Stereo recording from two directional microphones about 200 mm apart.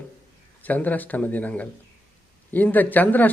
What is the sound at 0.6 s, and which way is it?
Speech, 10° left (ahead or behind).